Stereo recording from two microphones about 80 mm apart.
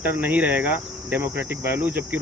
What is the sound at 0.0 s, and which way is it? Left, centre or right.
Speech, right.